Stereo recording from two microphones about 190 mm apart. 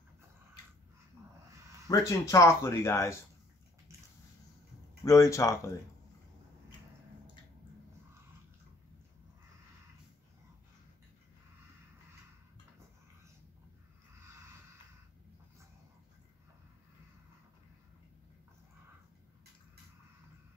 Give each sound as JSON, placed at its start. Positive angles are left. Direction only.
{"t": 1.9, "sound": "speech", "side_deg": 15}
{"t": 5.0, "sound": "speech", "side_deg": 15}